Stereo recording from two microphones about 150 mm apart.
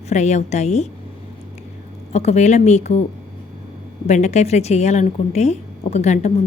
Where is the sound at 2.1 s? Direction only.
45° left (ahead or behind).